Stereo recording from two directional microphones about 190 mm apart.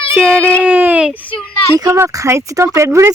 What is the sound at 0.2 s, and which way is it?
Speech, 5° left (ahead or behind).